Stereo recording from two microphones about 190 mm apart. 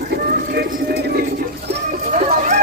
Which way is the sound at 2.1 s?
40° right (ahead or behind).